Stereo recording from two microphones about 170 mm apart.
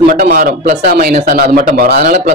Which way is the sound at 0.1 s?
60° right (ahead or behind).